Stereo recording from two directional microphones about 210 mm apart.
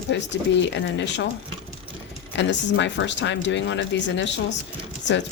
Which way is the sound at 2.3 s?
60° left (ahead or behind).